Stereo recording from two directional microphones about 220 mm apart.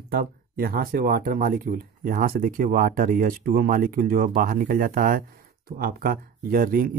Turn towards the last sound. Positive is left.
turn(degrees=-40)  # may be behind; listen again after turning